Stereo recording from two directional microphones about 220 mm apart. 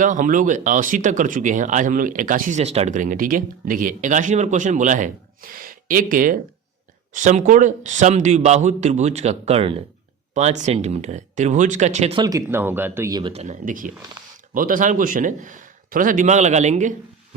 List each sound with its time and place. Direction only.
0.0 s speech: 35° right (ahead or behind)